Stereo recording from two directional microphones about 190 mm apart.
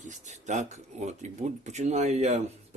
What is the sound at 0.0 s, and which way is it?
Speech, 40° right (ahead or behind).